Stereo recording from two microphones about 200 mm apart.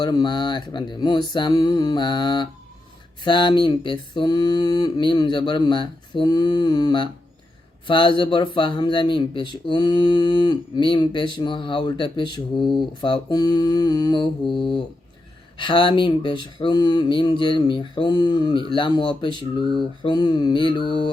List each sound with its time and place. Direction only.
0.0 s speech: 20° left (ahead or behind)
15.5 s speech: 25° left (ahead or behind)